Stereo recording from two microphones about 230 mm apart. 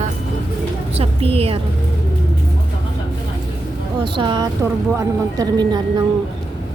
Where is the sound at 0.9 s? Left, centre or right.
Right.